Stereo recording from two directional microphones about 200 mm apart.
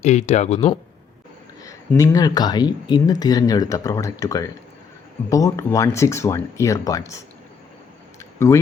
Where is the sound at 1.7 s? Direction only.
15° left (ahead or behind).